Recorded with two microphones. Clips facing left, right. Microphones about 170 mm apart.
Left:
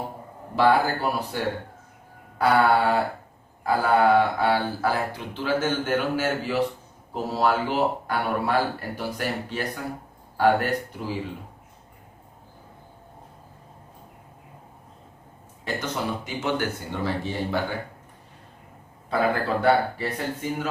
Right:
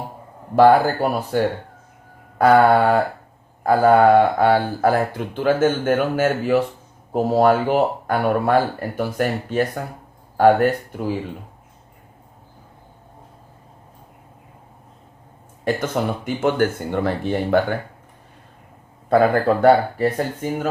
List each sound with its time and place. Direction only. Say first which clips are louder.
1.0 s speech: right 6 dB; 50° right (ahead or behind)
2.4 s speech: right 6 dB; 50° right (ahead or behind)
15.6 s speech: right 7 dB; 50° right (ahead or behind)
19.1 s speech: right 8 dB; 50° right (ahead or behind)